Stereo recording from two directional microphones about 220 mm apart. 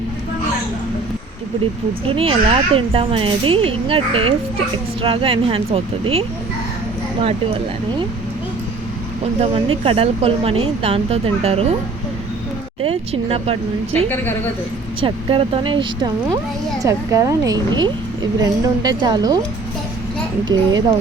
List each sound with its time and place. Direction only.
2.0 s a woman's voice: 25° right (ahead or behind)
9.8 s a woman's voice: 25° right (ahead or behind)
12.8 s a woman's voice: 25° right (ahead or behind)
20.5 s a woman's voice: 20° right (ahead or behind)